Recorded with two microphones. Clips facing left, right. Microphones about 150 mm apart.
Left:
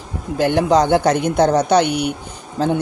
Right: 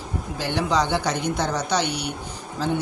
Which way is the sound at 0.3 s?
50° left (ahead or behind).